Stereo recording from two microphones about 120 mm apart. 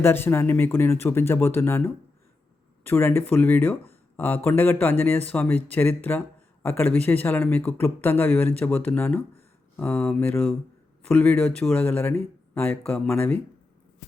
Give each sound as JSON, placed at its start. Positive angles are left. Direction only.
{"t": 0.0, "sound": "speech", "side_deg": 20}